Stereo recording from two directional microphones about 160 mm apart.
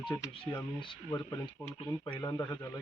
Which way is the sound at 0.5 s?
30° left (ahead or behind).